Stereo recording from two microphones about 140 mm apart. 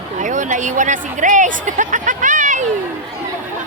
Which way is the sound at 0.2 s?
65° right (ahead or behind).